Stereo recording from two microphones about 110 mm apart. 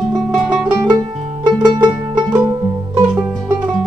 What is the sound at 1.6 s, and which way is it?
Music, 40° right (ahead or behind).